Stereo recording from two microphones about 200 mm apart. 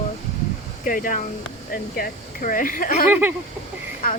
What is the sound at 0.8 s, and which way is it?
Speech, 40° left (ahead or behind).